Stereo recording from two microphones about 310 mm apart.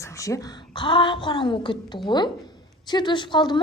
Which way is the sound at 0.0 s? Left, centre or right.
Centre.